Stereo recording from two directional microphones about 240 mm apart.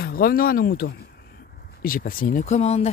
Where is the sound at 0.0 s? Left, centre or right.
Left.